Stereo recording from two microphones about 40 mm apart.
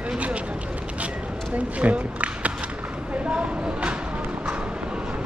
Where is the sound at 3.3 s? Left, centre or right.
Right.